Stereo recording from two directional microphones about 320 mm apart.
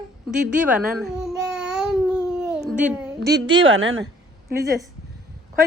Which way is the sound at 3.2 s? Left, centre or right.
Right.